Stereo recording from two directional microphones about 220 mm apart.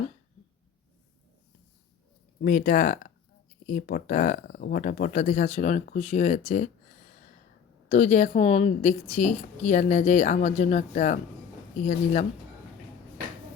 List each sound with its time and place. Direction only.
2.4 s a woman's voice: 40° left (ahead or behind)
7.9 s a woman's voice: 30° left (ahead or behind)